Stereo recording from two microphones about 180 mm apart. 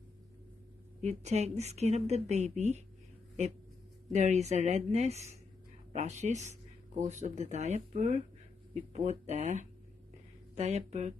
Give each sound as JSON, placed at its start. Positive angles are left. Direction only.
{"t": 1.0, "sound": "speech", "side_deg": -35}
{"t": 4.1, "sound": "speech", "side_deg": -40}